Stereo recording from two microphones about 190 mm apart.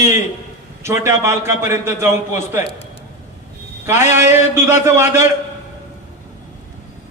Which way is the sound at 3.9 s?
40° left (ahead or behind).